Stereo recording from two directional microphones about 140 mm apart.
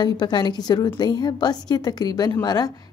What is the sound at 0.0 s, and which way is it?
A woman's voice, 30° left (ahead or behind).